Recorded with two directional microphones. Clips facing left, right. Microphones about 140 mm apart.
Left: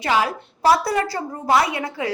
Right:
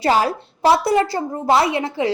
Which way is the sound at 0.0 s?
35° right (ahead or behind).